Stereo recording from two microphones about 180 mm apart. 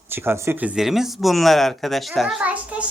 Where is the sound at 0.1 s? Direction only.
10° right (ahead or behind).